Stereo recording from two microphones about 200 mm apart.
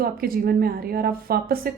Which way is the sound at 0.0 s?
50° right (ahead or behind).